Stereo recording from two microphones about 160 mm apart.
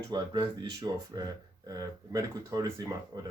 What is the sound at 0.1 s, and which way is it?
Speech, 25° right (ahead or behind).